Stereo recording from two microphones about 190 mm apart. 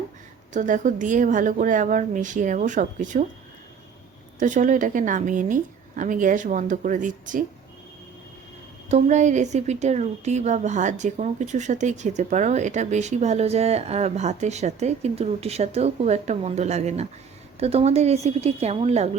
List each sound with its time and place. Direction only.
0.5 s a woman's voice: 40° right (ahead or behind)
4.4 s a woman's voice: 40° right (ahead or behind)
8.9 s a woman's voice: 40° right (ahead or behind)